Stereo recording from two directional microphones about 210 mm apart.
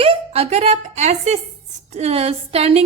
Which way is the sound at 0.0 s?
30° right (ahead or behind).